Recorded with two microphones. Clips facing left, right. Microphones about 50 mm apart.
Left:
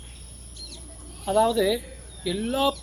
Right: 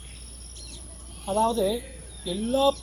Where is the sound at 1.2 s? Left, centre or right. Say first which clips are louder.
Left 3 dB; left.